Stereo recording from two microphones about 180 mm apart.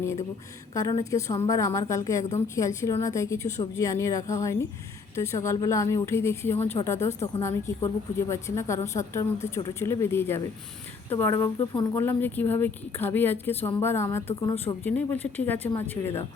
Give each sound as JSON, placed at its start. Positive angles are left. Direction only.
{"t": 0.0, "sound": "a woman's voice", "side_deg": 15}
{"t": 11.9, "sound": "a woman's voice", "side_deg": 10}